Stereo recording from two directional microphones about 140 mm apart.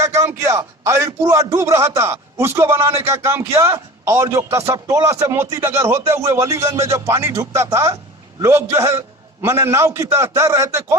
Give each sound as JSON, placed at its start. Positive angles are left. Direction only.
{"t": 0.0, "sound": "a man's voice", "side_deg": -20}